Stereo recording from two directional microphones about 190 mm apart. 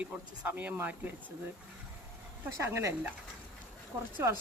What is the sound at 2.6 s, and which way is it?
Speech, 15° right (ahead or behind).